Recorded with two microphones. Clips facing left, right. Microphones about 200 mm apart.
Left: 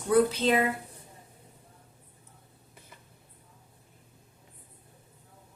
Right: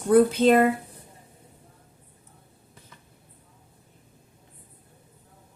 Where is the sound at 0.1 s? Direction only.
50° right (ahead or behind).